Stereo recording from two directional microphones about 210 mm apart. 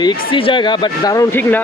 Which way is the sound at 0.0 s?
25° left (ahead or behind).